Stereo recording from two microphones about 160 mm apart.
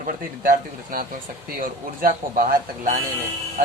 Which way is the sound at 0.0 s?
60° right (ahead or behind).